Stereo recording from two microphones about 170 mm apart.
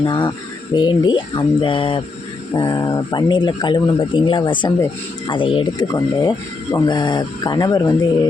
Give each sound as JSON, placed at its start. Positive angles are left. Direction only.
{"t": 0.0, "sound": "speech", "side_deg": 25}